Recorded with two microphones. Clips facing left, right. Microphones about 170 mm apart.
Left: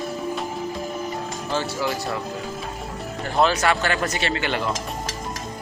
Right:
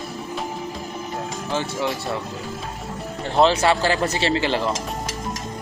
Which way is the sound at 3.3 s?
30° right (ahead or behind).